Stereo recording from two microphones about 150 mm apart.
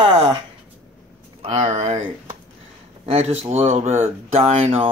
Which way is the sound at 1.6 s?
50° right (ahead or behind).